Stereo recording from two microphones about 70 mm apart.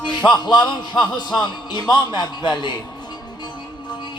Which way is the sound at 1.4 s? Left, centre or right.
Left.